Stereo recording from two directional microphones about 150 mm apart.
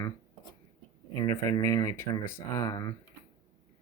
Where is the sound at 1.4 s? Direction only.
25° left (ahead or behind).